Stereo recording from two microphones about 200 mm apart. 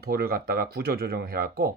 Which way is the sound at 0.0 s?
50° right (ahead or behind).